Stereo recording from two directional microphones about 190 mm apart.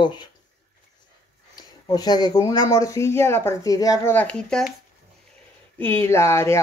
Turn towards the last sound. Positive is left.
turn(degrees=15)  # may be behind; listen again after turning